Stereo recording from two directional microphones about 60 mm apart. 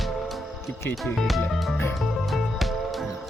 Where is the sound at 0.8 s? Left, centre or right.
Left.